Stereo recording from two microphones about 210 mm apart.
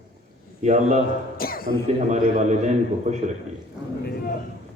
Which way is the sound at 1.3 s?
45° left (ahead or behind).